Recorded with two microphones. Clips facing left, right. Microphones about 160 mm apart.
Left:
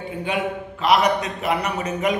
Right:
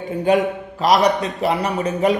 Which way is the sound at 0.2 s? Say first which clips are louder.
Right 8 dB; 40° right (ahead or behind).